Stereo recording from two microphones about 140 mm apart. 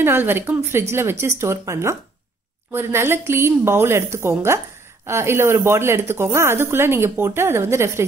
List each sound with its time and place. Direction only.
0.0 s speech: 15° right (ahead or behind)